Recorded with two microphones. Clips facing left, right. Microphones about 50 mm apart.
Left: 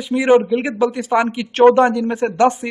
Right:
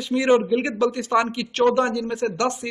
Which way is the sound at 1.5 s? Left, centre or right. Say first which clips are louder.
Left 8 dB; left.